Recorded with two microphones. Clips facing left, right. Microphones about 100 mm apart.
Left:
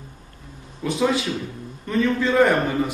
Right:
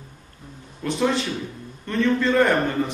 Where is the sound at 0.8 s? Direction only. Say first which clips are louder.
Left 1 dB; 5° left (ahead or behind).